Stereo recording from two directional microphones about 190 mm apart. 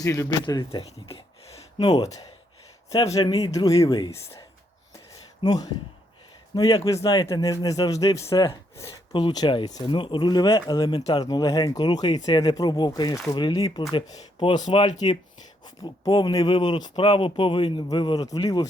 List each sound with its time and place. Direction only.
0.0 s speech: 15° left (ahead or behind)
1.9 s speech: 20° left (ahead or behind)